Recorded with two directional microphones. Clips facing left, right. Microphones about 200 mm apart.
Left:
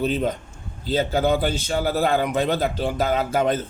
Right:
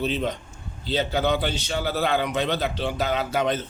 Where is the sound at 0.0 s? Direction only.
45° left (ahead or behind).